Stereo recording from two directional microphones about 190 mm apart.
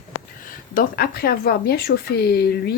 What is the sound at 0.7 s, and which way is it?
Speech, 50° left (ahead or behind).